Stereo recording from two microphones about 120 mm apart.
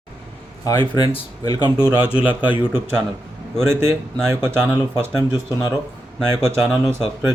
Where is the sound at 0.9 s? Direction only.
40° left (ahead or behind).